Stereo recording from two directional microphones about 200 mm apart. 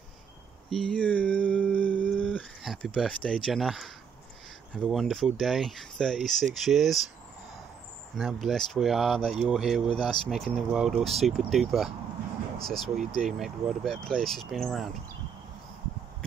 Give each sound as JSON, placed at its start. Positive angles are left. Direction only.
{"t": 0.7, "sound": "a sound", "side_deg": 5}
{"t": 4.7, "sound": "speech", "side_deg": 0}
{"t": 8.2, "sound": "speech", "side_deg": 0}